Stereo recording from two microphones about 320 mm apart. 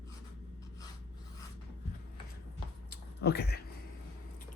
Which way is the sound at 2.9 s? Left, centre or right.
Left.